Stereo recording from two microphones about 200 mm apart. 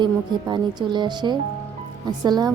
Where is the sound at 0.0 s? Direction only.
20° right (ahead or behind).